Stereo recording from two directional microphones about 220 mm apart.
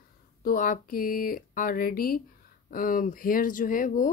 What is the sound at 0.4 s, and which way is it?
Speech, 40° left (ahead or behind).